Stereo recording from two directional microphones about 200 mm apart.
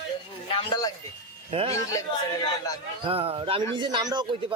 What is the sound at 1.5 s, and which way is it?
Speech, 30° right (ahead or behind).